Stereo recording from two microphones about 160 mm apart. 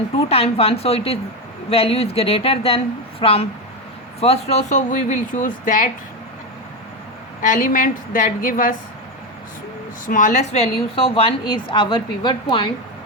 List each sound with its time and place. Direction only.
0.3 s a woman's voice: 40° left (ahead or behind); by 5.9 s 55° left (ahead or behind)
7.4 s a woman's voice: 55° left (ahead or behind)
10.1 s a woman's voice: 55° left (ahead or behind); by 12.7 s 30° left (ahead or behind)